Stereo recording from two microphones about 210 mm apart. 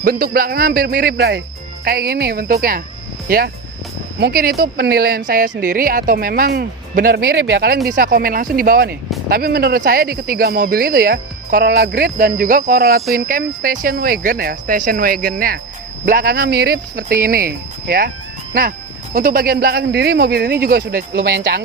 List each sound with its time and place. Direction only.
0.0 s speech: 45° right (ahead or behind)
19.1 s speech: 45° right (ahead or behind)